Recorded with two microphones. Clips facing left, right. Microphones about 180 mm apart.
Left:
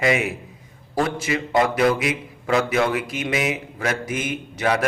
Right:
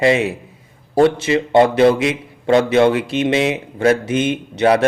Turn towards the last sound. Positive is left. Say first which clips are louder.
# right 8 dB
turn(degrees=-30)  # may be behind; listen again after turning